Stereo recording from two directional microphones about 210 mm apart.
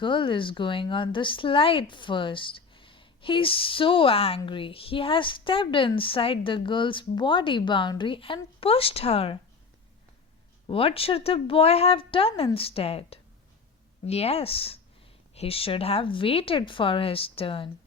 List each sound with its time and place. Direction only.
0.0 s speech: 25° left (ahead or behind)
10.7 s speech: 25° left (ahead or behind)